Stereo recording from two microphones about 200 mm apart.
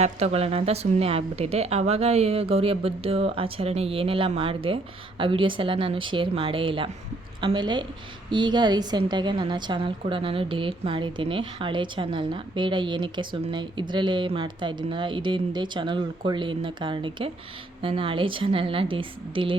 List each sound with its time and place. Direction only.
0.0 s a woman's voice: 35° right (ahead or behind)